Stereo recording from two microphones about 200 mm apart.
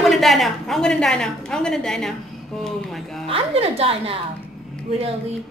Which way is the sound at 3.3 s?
30° right (ahead or behind).